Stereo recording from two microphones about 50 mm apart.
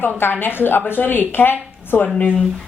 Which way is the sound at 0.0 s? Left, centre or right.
Left.